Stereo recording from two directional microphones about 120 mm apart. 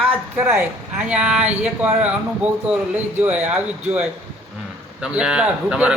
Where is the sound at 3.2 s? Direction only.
10° right (ahead or behind).